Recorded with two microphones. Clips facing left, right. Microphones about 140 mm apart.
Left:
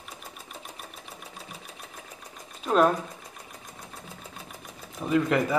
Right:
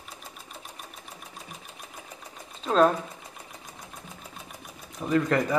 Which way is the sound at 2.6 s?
10° left (ahead or behind).